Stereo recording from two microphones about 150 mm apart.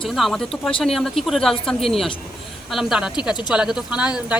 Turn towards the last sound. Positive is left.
turn(degrees=-5)  # may be behind; listen again after turning